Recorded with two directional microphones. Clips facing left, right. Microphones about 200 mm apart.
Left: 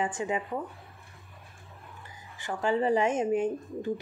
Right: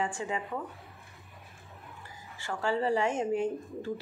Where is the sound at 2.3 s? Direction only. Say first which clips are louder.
Left 3 dB; 20° left (ahead or behind).